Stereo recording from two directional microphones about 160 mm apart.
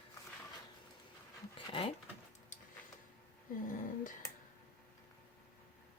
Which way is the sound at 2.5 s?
50° left (ahead or behind).